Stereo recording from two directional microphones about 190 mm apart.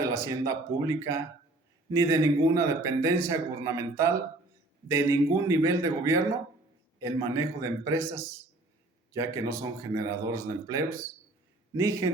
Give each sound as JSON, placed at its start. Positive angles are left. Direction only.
{"t": 0.0, "sound": "a man's voice", "side_deg": -15}